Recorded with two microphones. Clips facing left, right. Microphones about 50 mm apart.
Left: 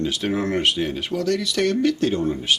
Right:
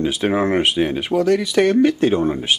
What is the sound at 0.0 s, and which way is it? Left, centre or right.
Speech, right.